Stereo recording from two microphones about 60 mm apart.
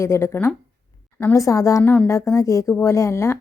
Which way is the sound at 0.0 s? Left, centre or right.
Left.